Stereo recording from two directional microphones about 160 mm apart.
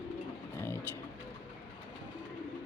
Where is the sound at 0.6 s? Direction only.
15° left (ahead or behind).